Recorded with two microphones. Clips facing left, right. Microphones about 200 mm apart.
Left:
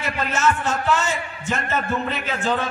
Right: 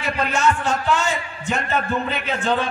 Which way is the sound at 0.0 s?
Centre (ahead or behind).